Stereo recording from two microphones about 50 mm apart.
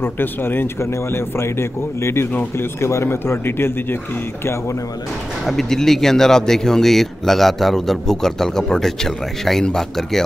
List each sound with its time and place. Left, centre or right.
0.0 s speech: left
0.7 s speech: left
5.4 s speech: centre